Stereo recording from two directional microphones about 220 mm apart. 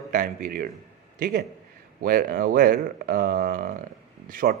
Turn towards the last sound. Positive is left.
turn(degrees=-40)  # may be behind; listen again after turning